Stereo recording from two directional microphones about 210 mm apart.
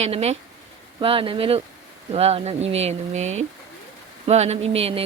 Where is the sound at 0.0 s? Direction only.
30° right (ahead or behind).